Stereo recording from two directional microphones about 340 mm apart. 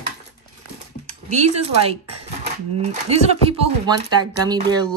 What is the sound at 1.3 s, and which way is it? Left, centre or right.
Speech, centre.